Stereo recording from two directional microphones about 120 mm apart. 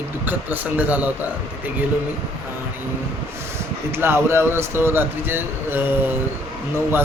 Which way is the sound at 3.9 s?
20° right (ahead or behind).